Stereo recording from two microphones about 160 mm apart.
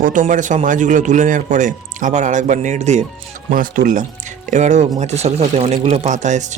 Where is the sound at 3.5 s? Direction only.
55° right (ahead or behind).